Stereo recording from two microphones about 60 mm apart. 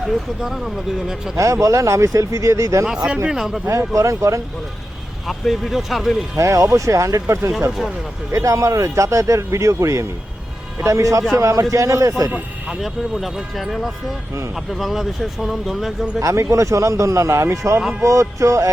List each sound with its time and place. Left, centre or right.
0.0 s speech: centre
1.4 s a man's voice: right
2.8 s speech: centre
3.7 s a man's voice: right
5.2 s speech: centre
6.3 s a man's voice: right
12.8 s speech: centre
16.2 s a man's voice: right